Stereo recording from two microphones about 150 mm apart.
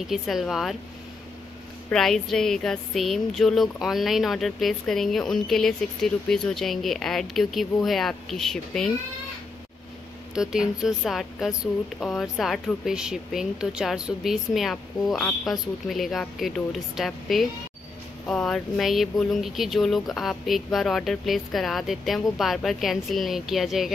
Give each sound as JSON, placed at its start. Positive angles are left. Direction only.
{"t": 0.1, "sound": "speech", "side_deg": 0}
{"t": 1.9, "sound": "speech", "side_deg": 5}
{"t": 10.3, "sound": "speech", "side_deg": -5}